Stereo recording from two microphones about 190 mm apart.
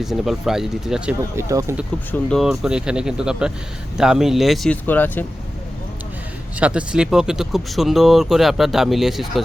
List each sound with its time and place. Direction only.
0.0 s speech: centre (ahead or behind)
1.4 s speech: 15° right (ahead or behind)
2.1 s speech: centre (ahead or behind)
6.6 s speech: 5° right (ahead or behind)